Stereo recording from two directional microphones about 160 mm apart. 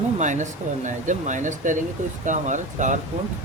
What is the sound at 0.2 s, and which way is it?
Speech, 50° right (ahead or behind).